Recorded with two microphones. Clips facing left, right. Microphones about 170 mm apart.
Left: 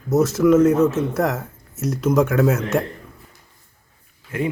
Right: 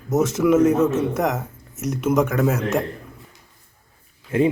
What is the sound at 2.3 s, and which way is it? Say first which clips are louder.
Speech: left 3 dB; centre (ahead or behind).